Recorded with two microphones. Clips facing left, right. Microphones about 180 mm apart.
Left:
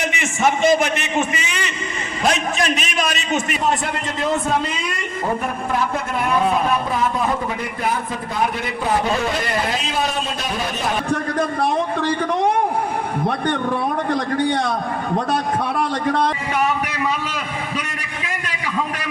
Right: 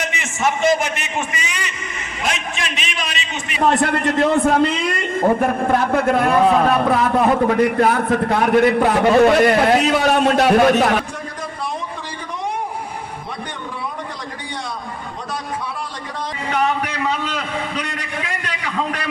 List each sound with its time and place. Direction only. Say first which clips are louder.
1.4 s a man's voice: left 2 dB; 25° left (ahead or behind)
2.2 s a man's voice: left 6 dB; 40° left (ahead or behind)
3.6 s a man's voice: right 5 dB; 60° right (ahead or behind)
5.4 s a man's voice: right 5 dB; 60° right (ahead or behind)
11.1 s a sound: left 9 dB; 65° left (ahead or behind)
12.3 s vehicle: left 5 dB; 70° left (ahead or behind)
15.3 s a man's voice: left 6 dB; 70° left (ahead or behind)